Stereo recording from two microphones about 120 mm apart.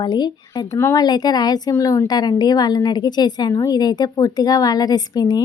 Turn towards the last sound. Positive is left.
turn(degrees=35)  # may be behind; listen again after turning